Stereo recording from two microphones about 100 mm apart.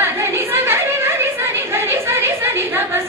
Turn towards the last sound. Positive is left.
turn(degrees=-25)  # may be behind; listen again after turning